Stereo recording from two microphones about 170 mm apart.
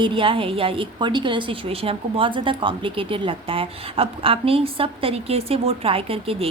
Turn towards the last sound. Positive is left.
turn(degrees=-35)  # may be behind; listen again after turning